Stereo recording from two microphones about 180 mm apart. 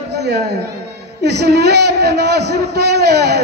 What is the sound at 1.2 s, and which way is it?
A man's voice, 65° right (ahead or behind).